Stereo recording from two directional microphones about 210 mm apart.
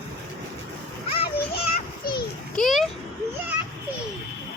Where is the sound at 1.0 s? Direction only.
25° left (ahead or behind).